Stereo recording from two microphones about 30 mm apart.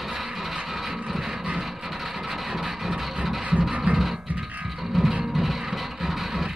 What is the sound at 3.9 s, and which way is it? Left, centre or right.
Music, centre.